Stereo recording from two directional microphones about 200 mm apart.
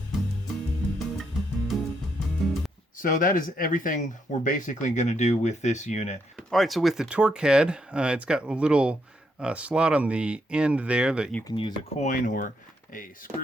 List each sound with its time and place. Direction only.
0.9 s music: centre (ahead or behind)
3.0 s speech: 45° left (ahead or behind)
6.3 s speech: centre (ahead or behind)
11.4 s speech: 25° left (ahead or behind)
12.0 s speech: 40° left (ahead or behind)